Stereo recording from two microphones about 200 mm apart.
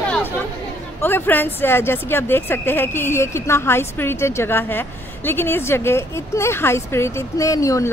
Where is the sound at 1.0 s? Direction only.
10° left (ahead or behind).